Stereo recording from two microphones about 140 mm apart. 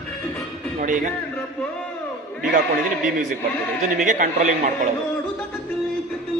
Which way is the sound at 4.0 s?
65° right (ahead or behind).